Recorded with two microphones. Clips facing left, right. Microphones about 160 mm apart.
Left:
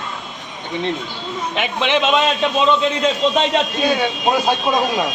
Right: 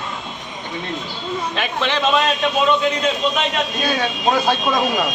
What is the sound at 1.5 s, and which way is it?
Speech, 20° left (ahead or behind).